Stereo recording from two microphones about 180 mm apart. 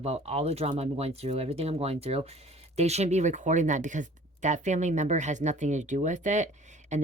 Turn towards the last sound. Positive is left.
turn(degrees=-40)  # may be behind; listen again after turning